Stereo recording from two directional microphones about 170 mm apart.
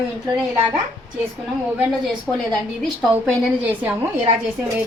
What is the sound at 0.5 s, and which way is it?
Speech, 10° right (ahead or behind).